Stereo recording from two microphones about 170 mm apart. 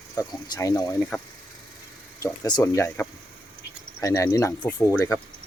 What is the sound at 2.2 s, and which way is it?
Speech, 20° left (ahead or behind).